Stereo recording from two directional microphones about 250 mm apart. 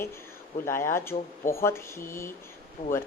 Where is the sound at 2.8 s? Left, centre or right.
Left.